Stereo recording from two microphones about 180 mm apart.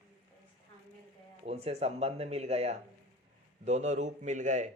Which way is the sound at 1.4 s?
35° right (ahead or behind).